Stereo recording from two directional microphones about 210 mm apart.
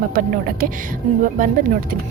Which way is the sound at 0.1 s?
40° right (ahead or behind).